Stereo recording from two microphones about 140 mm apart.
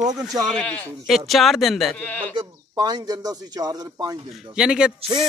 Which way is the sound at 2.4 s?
30° right (ahead or behind).